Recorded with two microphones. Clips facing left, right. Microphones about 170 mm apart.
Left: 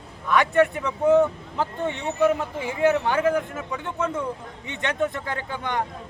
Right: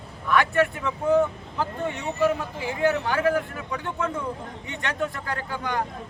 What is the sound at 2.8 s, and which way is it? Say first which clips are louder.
Speech: left 2 dB; 20° left (ahead or behind).